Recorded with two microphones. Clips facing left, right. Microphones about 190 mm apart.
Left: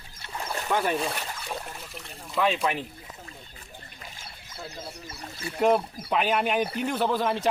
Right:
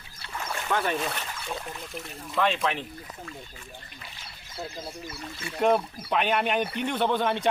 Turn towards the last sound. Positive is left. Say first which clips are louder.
# even
turn(degrees=0)  # may be behind; listen again after turning